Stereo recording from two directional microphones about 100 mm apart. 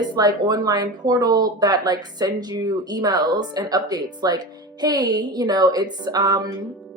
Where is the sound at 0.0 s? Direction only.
45° right (ahead or behind).